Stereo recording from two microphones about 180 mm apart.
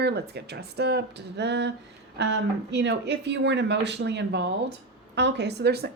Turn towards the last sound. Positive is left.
turn(degrees=-65)  # may be behind; listen again after turning